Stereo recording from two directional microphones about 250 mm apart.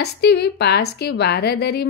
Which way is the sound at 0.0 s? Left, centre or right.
Left.